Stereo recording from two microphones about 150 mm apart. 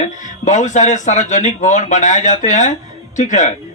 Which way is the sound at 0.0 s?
55° left (ahead or behind).